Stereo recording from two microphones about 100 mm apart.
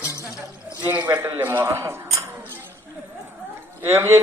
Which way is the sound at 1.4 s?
20° right (ahead or behind).